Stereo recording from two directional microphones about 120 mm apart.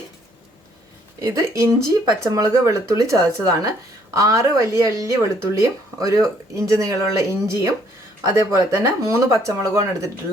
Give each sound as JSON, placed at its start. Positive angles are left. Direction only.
{"t": 1.2, "sound": "speech", "side_deg": -25}